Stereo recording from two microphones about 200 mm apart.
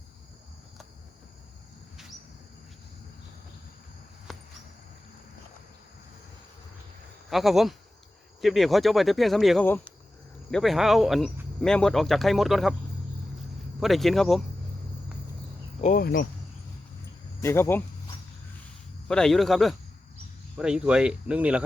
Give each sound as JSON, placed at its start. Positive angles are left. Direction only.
{"t": 4.3, "sound": "cricket", "side_deg": 0}
{"t": 7.3, "sound": "speech", "side_deg": 0}
{"t": 13.7, "sound": "speech", "side_deg": 0}
{"t": 15.8, "sound": "speech", "side_deg": 45}
{"t": 17.4, "sound": "speech", "side_deg": 10}
{"t": 19.0, "sound": "speech", "side_deg": 5}